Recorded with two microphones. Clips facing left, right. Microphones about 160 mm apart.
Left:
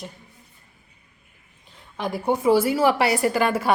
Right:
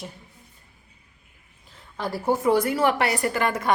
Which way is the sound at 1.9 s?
20° left (ahead or behind).